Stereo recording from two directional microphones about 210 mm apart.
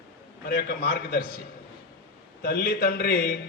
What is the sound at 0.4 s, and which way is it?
Speech, 50° left (ahead or behind).